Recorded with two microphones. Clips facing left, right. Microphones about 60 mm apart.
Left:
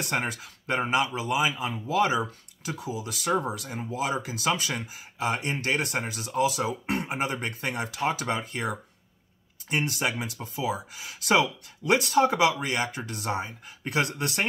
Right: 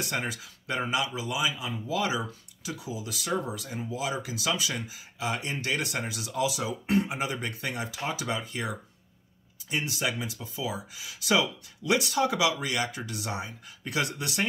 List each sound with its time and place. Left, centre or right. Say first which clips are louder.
0.0 s speech: left 3 dB; left